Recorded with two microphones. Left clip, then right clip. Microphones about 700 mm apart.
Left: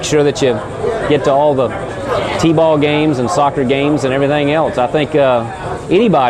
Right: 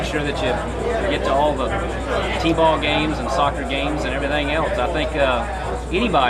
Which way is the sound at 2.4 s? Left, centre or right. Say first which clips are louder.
Left 6 dB; left.